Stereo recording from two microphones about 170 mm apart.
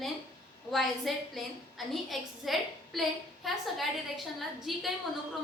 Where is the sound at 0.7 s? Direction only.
Centre (ahead or behind).